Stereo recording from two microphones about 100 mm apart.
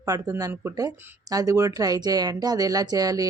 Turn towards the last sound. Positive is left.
turn(degrees=-35)  # may be behind; listen again after turning